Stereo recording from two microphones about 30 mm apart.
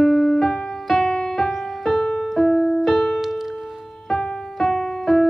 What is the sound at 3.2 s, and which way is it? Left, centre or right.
Music, centre.